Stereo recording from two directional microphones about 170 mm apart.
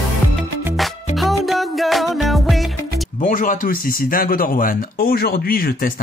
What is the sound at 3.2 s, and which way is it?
Speech, 50° left (ahead or behind).